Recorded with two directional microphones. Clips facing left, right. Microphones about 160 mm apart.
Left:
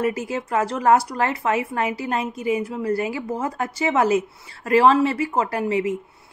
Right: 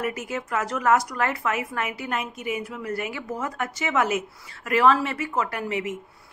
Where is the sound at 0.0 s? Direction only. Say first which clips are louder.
Left 5 dB; 30° left (ahead or behind).